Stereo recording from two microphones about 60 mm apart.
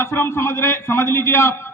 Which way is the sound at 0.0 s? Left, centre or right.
Left.